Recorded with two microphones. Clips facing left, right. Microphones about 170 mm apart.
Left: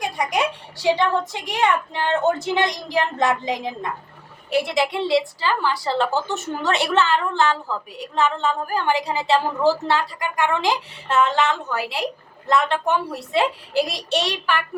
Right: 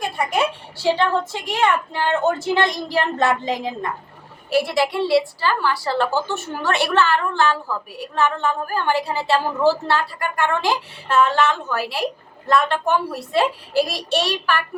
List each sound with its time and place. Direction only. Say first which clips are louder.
0.0 s a woman's voice: right 1 dB; 15° left (ahead or behind)